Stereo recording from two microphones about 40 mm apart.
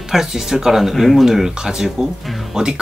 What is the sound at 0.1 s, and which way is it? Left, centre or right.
Speech, centre.